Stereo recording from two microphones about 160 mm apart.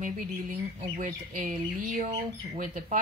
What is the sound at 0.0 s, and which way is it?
Speech, 55° right (ahead or behind).